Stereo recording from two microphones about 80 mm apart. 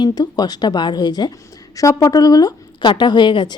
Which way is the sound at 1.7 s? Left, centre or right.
Left.